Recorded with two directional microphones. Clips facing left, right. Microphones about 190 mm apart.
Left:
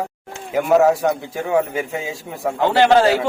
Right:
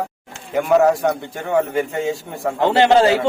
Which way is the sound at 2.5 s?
20° right (ahead or behind).